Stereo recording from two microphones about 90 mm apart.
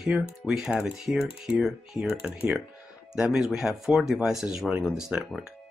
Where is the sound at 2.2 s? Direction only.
15° right (ahead or behind).